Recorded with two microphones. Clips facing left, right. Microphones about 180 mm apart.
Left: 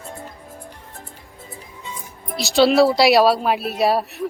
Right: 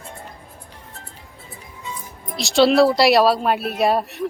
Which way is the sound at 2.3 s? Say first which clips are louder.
Even; centre (ahead or behind).